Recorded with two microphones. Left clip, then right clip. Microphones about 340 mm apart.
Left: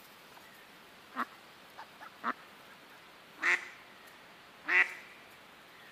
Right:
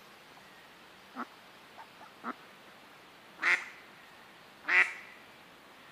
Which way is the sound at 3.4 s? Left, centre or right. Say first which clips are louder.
Right 1 dB; centre.